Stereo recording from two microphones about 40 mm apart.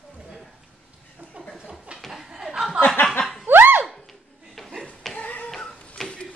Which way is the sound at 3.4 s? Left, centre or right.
Right.